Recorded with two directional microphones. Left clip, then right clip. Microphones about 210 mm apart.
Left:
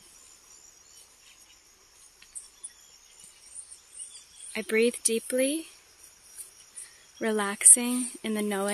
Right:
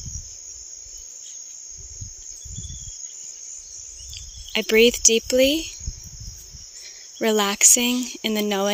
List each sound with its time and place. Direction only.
4.5 s speech: 30° right (ahead or behind)
7.2 s speech: 25° right (ahead or behind)